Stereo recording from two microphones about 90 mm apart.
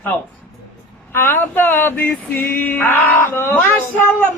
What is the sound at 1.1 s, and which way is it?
Male singing, 25° left (ahead or behind).